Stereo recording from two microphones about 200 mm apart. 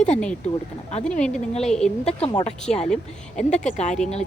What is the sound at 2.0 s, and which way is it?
Speech, 30° left (ahead or behind).